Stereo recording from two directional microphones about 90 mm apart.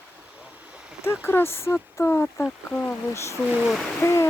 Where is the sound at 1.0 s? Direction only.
25° left (ahead or behind).